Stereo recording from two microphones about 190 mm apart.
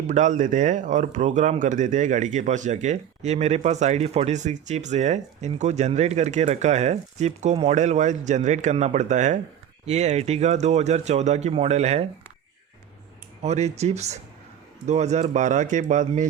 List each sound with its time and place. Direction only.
0.1 s speech: 40° right (ahead or behind)
13.4 s speech: 35° right (ahead or behind)